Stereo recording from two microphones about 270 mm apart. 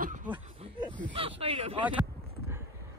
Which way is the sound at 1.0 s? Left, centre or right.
Centre.